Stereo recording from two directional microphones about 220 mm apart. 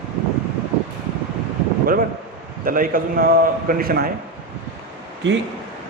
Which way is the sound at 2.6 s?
40° right (ahead or behind).